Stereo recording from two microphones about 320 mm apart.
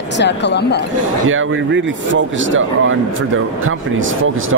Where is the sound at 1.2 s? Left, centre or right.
Right.